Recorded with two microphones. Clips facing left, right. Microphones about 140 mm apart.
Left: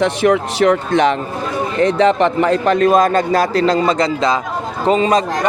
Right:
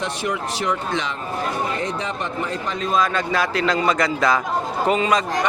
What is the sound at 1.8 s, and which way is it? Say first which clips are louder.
A man's voice: left 13 dB; 75° left (ahead or behind).